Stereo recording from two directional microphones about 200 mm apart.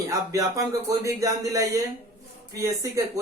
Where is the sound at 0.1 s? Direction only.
15° right (ahead or behind).